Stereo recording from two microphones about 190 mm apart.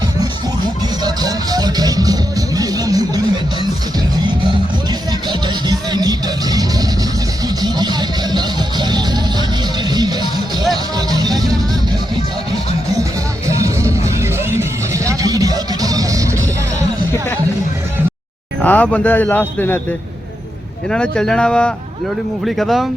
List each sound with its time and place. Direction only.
0.2 s music: 20° right (ahead or behind)
5.3 s music: 20° right (ahead or behind)
13.6 s music: 15° right (ahead or behind)
18.6 s a man's voice: 10° left (ahead or behind)
20.9 s speech: 5° left (ahead or behind)